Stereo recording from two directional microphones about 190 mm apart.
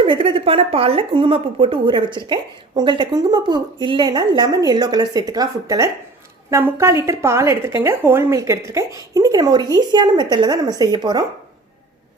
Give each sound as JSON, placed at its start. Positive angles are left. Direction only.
{"t": 0.0, "sound": "a woman's voice", "side_deg": -25}